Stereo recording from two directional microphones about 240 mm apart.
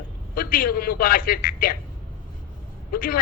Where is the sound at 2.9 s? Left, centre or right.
Left.